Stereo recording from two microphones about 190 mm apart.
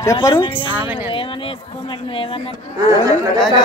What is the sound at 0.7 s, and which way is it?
Speech, 10° right (ahead or behind).